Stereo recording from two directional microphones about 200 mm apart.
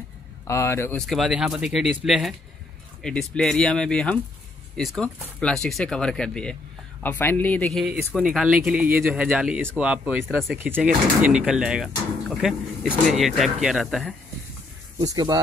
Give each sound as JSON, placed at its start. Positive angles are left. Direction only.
{"t": 0.5, "sound": "speech", "side_deg": 15}
{"t": 1.0, "sound": "speech", "side_deg": 0}
{"t": 15.0, "sound": "speech", "side_deg": -20}